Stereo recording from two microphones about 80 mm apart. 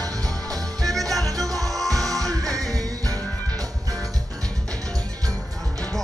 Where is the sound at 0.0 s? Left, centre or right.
Right.